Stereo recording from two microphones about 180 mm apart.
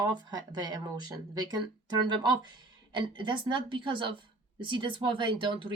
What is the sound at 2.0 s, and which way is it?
Speech, 25° right (ahead or behind).